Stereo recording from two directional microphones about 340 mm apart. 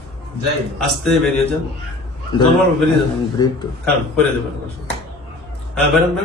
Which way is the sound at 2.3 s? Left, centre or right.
Centre.